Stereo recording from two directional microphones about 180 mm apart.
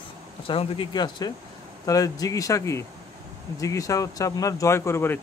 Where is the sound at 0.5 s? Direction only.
30° left (ahead or behind).